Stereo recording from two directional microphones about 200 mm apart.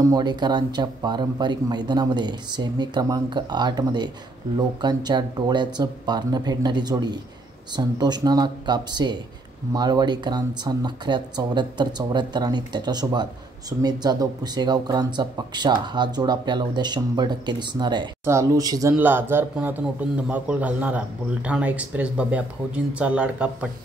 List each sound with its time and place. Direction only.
0.0 s speech: 20° right (ahead or behind)